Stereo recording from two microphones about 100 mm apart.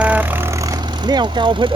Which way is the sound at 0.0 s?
15° right (ahead or behind).